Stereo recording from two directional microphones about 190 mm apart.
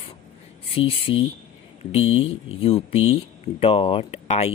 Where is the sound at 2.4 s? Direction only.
30° left (ahead or behind).